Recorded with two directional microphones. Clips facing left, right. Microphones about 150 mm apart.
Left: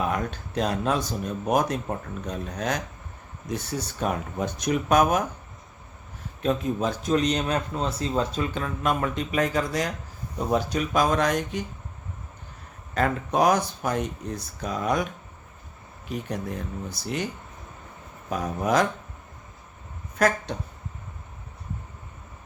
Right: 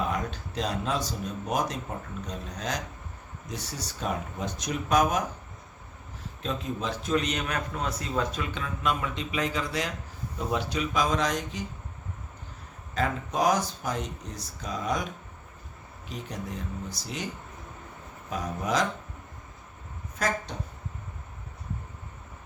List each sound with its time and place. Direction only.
0.1 s speech: 55° left (ahead or behind)
6.4 s a man's voice: 50° left (ahead or behind)
12.9 s speech: 60° left (ahead or behind)
16.0 s speech: 60° left (ahead or behind)
18.3 s speech: 55° left (ahead or behind)
20.2 s speech: 65° left (ahead or behind)